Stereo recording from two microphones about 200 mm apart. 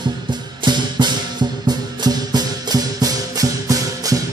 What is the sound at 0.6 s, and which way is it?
Music, 20° right (ahead or behind).